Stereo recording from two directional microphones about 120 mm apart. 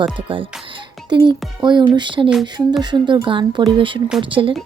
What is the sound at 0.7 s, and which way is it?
Music, 40° right (ahead or behind).